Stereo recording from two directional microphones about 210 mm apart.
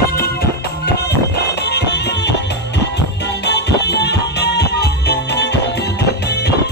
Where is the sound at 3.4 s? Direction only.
55° left (ahead or behind).